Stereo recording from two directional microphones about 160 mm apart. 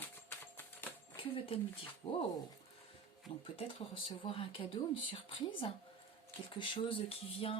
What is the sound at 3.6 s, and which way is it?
Speech, 35° left (ahead or behind).